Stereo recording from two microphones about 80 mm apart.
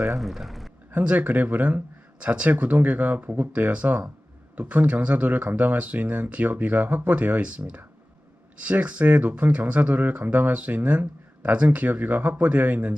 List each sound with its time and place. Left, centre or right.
0.1 s speech: centre
0.9 s speech: right